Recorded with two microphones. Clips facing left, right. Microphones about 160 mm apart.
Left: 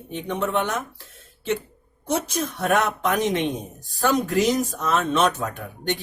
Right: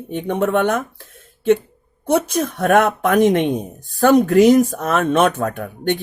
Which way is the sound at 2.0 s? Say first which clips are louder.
Right 7 dB; 55° right (ahead or behind).